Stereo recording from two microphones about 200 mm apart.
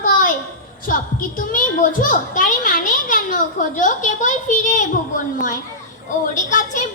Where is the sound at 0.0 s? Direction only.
40° left (ahead or behind).